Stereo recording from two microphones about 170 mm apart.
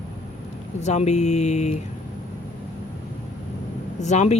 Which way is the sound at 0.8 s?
40° left (ahead or behind).